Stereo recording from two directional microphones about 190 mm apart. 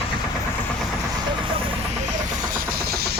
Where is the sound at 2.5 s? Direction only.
50° right (ahead or behind).